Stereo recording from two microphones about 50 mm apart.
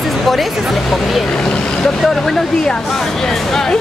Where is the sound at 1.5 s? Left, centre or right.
Centre.